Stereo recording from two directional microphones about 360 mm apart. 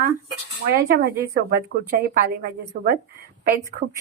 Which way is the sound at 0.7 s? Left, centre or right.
Right.